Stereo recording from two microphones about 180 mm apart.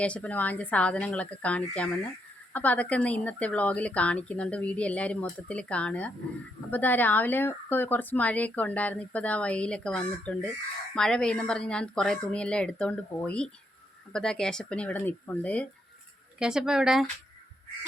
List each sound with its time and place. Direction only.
0.0 s speech: 5° left (ahead or behind)
16.4 s speech: 5° right (ahead or behind)